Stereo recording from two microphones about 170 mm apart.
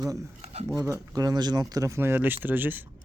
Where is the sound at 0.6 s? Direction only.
20° right (ahead or behind).